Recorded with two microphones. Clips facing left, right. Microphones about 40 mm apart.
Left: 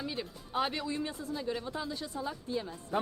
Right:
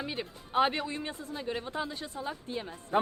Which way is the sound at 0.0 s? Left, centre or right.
Right.